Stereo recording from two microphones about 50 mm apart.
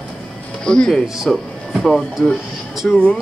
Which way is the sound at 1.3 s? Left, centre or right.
Centre.